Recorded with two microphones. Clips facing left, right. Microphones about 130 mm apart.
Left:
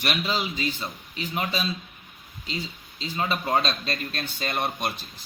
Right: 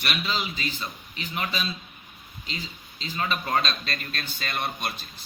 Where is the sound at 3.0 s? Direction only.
25° left (ahead or behind).